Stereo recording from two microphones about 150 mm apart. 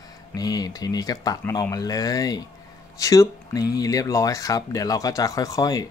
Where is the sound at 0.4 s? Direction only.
25° left (ahead or behind).